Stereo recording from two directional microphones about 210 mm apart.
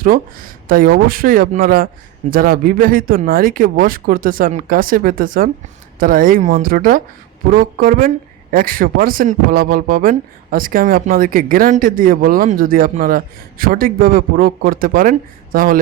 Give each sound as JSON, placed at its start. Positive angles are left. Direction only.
{"t": 0.0, "sound": "speech", "side_deg": -40}